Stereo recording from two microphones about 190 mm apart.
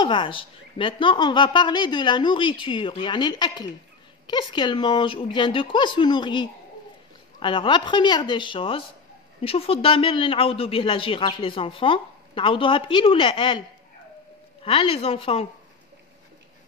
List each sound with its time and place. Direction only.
0.0 s speech: 25° left (ahead or behind)
14.6 s speech: 30° left (ahead or behind)